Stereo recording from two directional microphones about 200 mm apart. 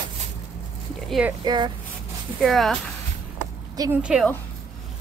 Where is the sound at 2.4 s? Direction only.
Centre (ahead or behind).